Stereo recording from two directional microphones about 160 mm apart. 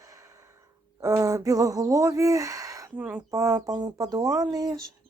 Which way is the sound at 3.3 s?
20° right (ahead or behind).